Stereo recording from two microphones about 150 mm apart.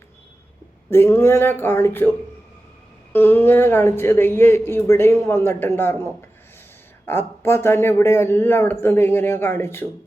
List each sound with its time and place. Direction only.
0.9 s speech: 15° left (ahead or behind)
3.1 s speech: 15° left (ahead or behind)
7.1 s speech: 15° left (ahead or behind)